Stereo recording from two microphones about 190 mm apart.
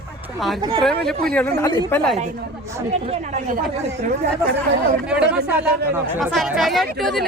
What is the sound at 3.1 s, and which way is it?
Speech, 45° right (ahead or behind).